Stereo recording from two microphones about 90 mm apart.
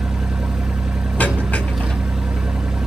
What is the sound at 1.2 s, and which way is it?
Vehicle, 15° left (ahead or behind).